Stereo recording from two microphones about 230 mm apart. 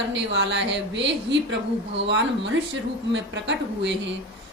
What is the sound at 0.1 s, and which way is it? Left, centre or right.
A woman's voice, right.